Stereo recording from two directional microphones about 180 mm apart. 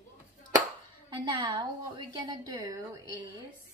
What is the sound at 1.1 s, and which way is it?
A woman's voice, 25° right (ahead or behind).